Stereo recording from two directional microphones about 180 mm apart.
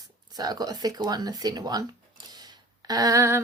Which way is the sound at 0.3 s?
20° right (ahead or behind).